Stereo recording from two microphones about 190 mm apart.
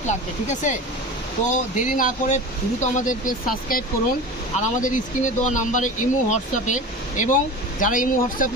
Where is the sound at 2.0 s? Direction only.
40° left (ahead or behind).